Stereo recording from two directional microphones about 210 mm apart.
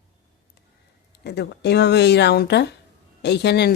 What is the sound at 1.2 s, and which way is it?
Speech, 55° left (ahead or behind).